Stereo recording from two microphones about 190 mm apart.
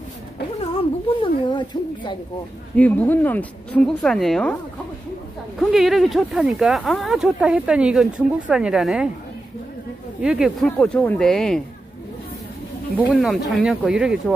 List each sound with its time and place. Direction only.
0.6 s speech: 30° left (ahead or behind)
2.7 s speech: 10° left (ahead or behind)
5.6 s speech: centre (ahead or behind)
10.2 s speech: 5° right (ahead or behind)
12.9 s speech: 5° right (ahead or behind)